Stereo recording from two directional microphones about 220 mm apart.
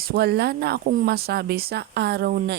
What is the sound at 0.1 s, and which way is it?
Speech, 45° right (ahead or behind).